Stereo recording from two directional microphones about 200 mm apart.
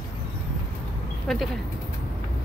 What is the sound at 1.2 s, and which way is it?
Speech, centre (ahead or behind).